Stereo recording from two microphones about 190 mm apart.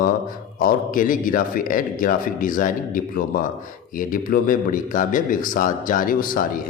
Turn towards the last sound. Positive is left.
turn(degrees=50)  # may be behind; listen again after turning